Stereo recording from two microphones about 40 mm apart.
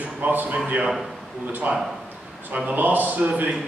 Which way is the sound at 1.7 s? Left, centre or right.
Right.